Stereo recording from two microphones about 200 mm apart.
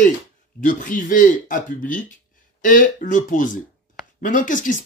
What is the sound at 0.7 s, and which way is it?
Speech, 40° left (ahead or behind).